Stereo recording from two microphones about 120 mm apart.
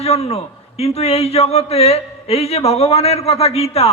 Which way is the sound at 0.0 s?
60° left (ahead or behind).